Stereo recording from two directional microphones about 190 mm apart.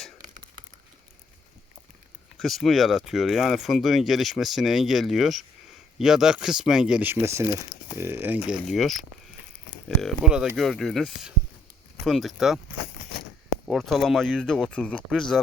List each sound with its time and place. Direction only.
2.4 s speech: centre (ahead or behind)
13.7 s speech: centre (ahead or behind)